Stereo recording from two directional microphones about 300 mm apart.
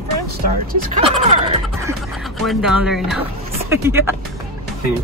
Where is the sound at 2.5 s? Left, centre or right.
Centre.